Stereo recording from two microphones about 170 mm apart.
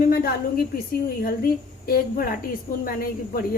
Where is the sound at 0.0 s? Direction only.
65° left (ahead or behind).